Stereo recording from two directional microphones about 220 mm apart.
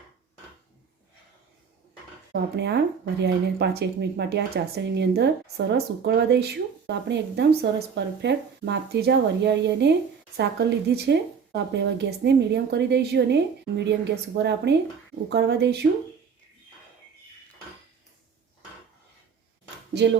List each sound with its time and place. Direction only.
2.3 s speech: 50° right (ahead or behind)
19.9 s speech: 50° right (ahead or behind)